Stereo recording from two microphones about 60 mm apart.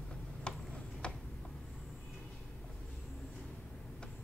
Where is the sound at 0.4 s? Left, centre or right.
Centre.